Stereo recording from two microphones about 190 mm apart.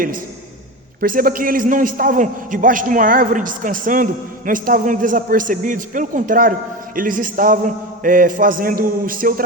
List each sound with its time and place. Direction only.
1.0 s a man's voice: 50° right (ahead or behind)